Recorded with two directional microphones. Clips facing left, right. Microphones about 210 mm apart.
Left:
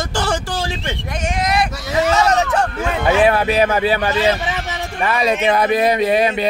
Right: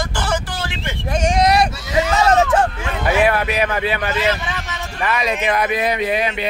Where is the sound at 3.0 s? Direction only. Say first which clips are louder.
Left 2 dB; 25° left (ahead or behind).